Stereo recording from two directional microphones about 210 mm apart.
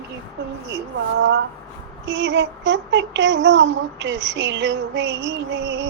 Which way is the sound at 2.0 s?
60° right (ahead or behind).